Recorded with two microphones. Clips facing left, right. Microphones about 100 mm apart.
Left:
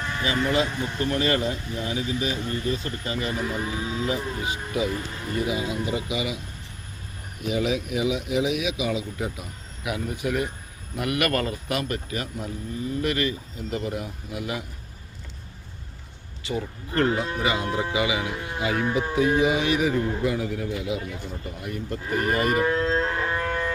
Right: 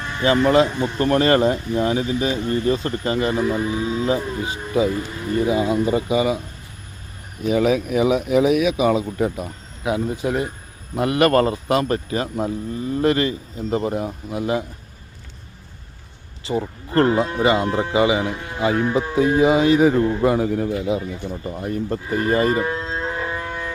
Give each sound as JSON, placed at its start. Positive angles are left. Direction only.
{"t": 0.4, "sound": "speech", "side_deg": -40}
{"t": 1.0, "sound": "speech", "side_deg": -50}
{"t": 7.4, "sound": "speech", "side_deg": -45}
{"t": 9.8, "sound": "speech", "side_deg": -25}
{"t": 16.4, "sound": "speech", "side_deg": -35}
{"t": 19.9, "sound": "speech", "side_deg": -45}
{"t": 22.6, "sound": "music", "side_deg": -10}